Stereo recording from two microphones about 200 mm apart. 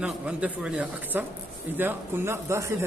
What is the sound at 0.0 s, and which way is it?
A man's voice, 5° right (ahead or behind).